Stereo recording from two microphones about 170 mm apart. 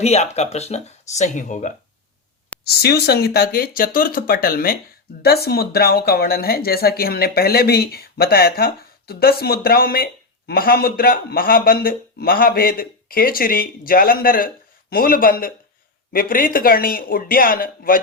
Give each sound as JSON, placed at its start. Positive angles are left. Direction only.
{"t": 0.0, "sound": "speech", "side_deg": 40}
{"t": 2.6, "sound": "speech", "side_deg": 70}